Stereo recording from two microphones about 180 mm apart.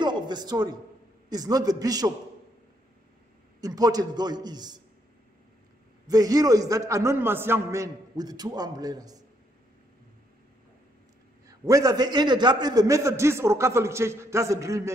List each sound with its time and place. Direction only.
0.0 s a sound: 25° right (ahead or behind)
1.3 s a man's voice: 20° right (ahead or behind)
3.6 s a man's voice: 20° right (ahead or behind)
6.0 s a man's voice: 20° right (ahead or behind)
11.4 s a man's voice: 20° right (ahead or behind)